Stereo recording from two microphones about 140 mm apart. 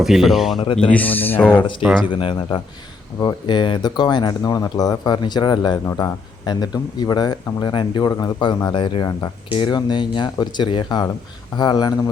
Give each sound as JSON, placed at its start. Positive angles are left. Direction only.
{"t": 0.0, "sound": "speech", "side_deg": 0}
{"t": 0.6, "sound": "speech", "side_deg": 40}
{"t": 0.9, "sound": "speech", "side_deg": 10}
{"t": 1.5, "sound": "speech", "side_deg": 35}